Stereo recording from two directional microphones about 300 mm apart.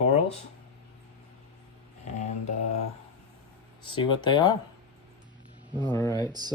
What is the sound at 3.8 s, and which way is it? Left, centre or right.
Speech, centre.